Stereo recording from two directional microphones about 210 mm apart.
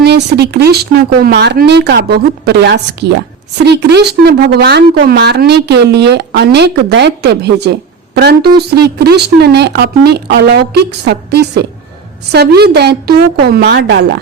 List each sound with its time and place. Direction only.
0.0 s a woman's voice: 50° right (ahead or behind)